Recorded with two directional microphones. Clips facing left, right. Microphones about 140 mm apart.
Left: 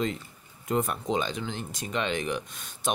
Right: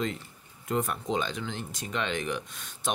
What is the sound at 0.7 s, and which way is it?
Speech, 15° left (ahead or behind).